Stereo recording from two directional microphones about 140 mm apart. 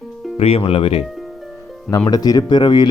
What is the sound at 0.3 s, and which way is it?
Speech, 45° left (ahead or behind).